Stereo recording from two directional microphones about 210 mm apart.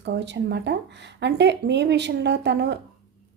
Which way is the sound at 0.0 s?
55° right (ahead or behind).